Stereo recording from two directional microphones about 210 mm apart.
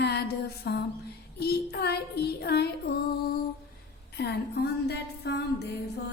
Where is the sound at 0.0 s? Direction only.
50° left (ahead or behind).